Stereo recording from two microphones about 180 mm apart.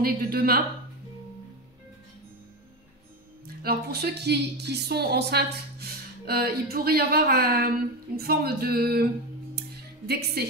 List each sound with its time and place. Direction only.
0.0 s speech: 55° right (ahead or behind)
3.4 s speech: 60° right (ahead or behind)
9.6 s music: 60° right (ahead or behind)